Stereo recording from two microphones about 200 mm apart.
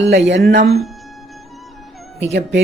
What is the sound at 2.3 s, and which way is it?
Speech, 60° right (ahead or behind).